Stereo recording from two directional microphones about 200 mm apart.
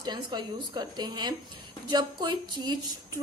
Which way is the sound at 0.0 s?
20° right (ahead or behind).